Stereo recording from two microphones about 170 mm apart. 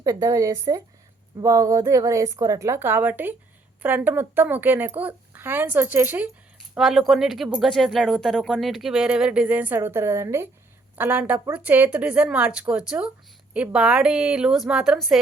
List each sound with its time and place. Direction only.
0.0 s a woman's voice: 20° right (ahead or behind); by 15.2 s centre (ahead or behind)